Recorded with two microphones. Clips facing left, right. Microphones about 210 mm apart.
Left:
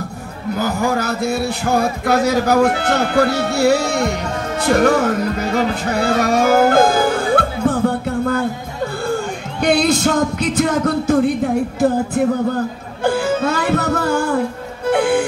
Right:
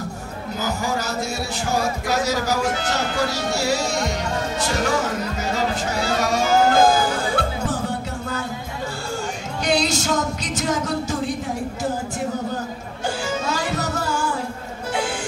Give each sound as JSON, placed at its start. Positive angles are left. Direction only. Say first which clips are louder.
{"t": 0.6, "sound": "speech", "louder": "left 6 dB", "side_deg": 55}
{"t": 9.0, "sound": "music", "louder": "left 7 dB", "side_deg": 55}
{"t": 13.0, "sound": "music", "louder": "left 9 dB", "side_deg": 60}